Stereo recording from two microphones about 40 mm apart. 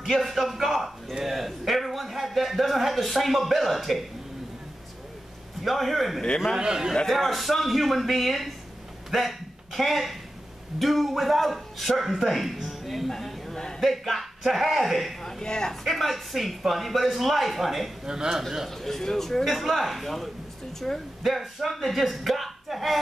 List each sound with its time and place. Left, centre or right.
0.0 s a man's voice: centre
5.6 s a man's voice: centre
6.5 s a man's voice: centre
7.1 s a man's voice: centre
13.1 s a sound: centre
13.7 s a man's voice: centre
15.4 s a man's voice: centre
15.7 s a man's voice: centre
18.0 s a man's voice: centre
18.7 s a man's voice: centre